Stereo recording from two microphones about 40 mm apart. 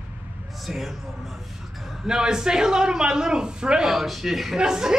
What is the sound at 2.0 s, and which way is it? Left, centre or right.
A man's voice, centre.